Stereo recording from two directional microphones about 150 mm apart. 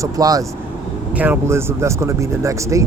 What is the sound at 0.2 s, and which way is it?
Speech, 25° right (ahead or behind).